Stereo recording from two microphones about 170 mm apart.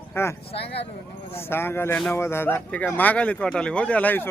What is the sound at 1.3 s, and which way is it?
A man's voice, 15° left (ahead or behind).